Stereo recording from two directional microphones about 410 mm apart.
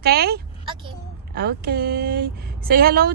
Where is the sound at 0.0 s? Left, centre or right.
Right.